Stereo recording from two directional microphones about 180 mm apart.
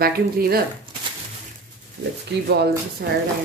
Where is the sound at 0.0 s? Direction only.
60° right (ahead or behind).